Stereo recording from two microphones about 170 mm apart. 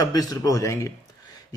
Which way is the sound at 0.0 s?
20° left (ahead or behind).